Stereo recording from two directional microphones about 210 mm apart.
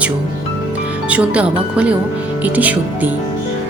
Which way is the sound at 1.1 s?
5° right (ahead or behind).